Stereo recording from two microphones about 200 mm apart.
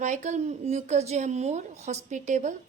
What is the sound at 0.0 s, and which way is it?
A woman's voice, 35° right (ahead or behind).